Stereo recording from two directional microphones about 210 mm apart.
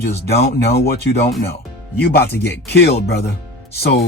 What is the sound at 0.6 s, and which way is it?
Speech, 50° left (ahead or behind).